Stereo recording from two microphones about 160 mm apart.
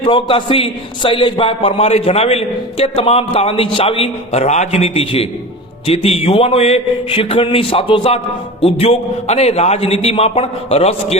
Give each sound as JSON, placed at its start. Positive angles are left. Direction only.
{"t": 0.0, "sound": "a man's voice", "side_deg": 30}